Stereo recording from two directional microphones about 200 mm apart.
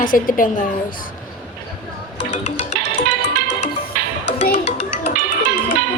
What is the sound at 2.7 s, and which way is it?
Music, 60° left (ahead or behind).